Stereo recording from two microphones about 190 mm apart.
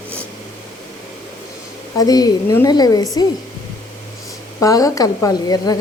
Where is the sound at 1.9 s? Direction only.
20° left (ahead or behind).